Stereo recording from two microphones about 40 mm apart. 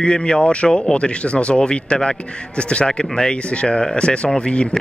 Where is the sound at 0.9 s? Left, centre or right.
Left.